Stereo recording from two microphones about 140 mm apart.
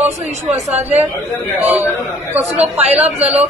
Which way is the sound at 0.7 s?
50° right (ahead or behind).